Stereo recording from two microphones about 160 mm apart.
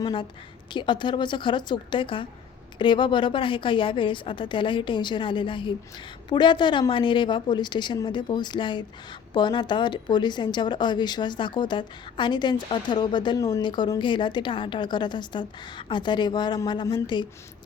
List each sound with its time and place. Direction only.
0.0 s a woman's voice: 30° left (ahead or behind)